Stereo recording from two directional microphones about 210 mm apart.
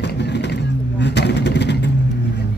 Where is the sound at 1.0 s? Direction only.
55° left (ahead or behind).